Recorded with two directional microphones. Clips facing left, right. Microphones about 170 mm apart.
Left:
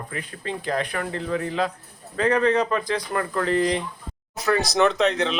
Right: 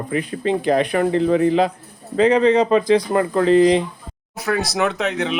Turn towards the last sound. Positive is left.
turn(degrees=-5)  # may be behind; listen again after turning